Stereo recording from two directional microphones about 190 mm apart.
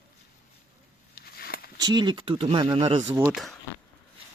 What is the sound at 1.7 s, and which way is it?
Speech, 20° right (ahead or behind).